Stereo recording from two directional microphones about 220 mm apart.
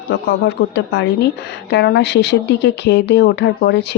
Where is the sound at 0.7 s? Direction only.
50° left (ahead or behind).